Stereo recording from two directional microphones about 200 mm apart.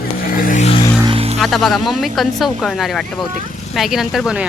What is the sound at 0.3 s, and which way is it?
Music, 45° left (ahead or behind).